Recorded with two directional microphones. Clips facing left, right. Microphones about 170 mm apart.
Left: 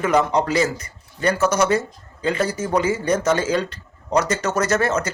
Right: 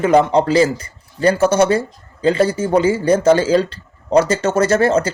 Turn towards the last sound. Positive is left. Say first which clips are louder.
# right 6 dB
turn(degrees=-30)  # may be behind; listen again after turning